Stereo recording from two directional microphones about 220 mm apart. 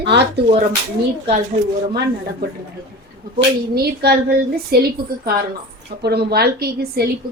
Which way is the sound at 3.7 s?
45° right (ahead or behind).